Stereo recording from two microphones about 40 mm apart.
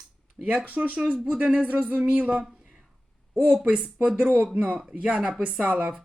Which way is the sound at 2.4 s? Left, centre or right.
Centre.